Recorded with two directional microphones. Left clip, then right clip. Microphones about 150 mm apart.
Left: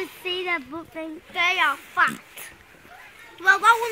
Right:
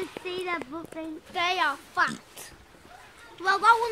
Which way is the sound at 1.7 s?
35° right (ahead or behind).